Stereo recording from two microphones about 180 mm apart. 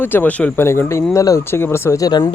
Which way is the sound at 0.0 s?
10° left (ahead or behind).